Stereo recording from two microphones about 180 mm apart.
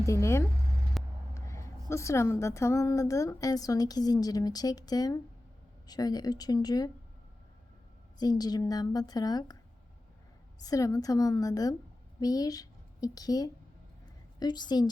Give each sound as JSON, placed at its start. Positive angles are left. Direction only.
{"t": 0.0, "sound": "speech", "side_deg": 15}
{"t": 1.0, "sound": "vehicle", "side_deg": 0}
{"t": 1.3, "sound": "a woman's voice", "side_deg": 15}
{"t": 8.2, "sound": "a woman's voice", "side_deg": 20}
{"t": 10.6, "sound": "a woman's voice", "side_deg": 20}